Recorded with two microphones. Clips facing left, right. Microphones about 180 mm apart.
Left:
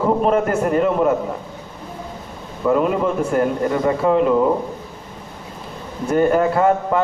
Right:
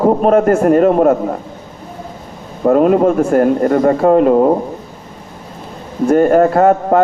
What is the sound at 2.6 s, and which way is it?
A man's voice, 45° right (ahead or behind).